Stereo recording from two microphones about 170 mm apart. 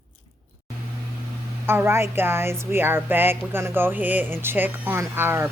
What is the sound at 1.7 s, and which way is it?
Speech, 15° right (ahead or behind).